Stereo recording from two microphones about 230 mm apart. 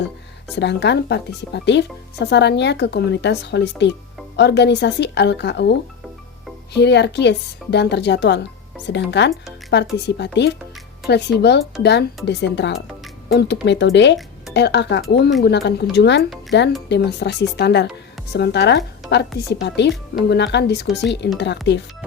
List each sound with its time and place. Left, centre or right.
0.5 s speech: left
6.7 s speech: left